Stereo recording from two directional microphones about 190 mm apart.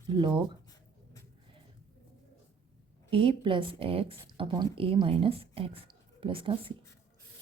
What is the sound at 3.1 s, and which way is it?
Speech, 30° right (ahead or behind).